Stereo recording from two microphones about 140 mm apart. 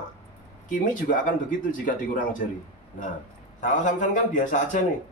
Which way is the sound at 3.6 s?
65° left (ahead or behind).